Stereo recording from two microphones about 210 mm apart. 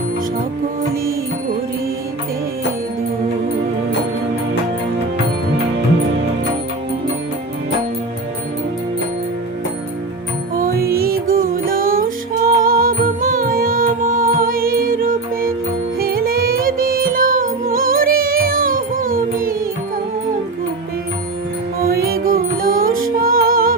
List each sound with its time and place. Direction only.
10.6 s music: 45° right (ahead or behind)
21.8 s music: 45° right (ahead or behind)